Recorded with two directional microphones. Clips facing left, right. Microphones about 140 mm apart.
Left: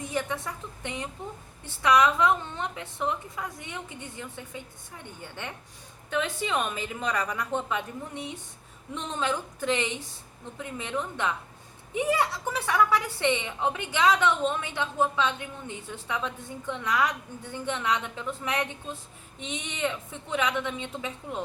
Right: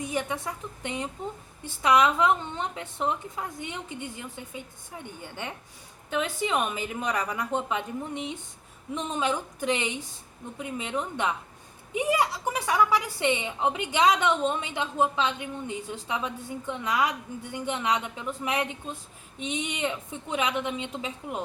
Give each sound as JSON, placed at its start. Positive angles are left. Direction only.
{"t": 0.0, "sound": "a woman's voice", "side_deg": -15}
{"t": 6.1, "sound": "a woman's voice", "side_deg": -15}